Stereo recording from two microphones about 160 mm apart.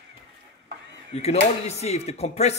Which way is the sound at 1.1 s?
45° left (ahead or behind).